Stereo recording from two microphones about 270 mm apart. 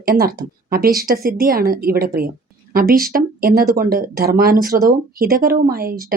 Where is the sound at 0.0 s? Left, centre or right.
Right.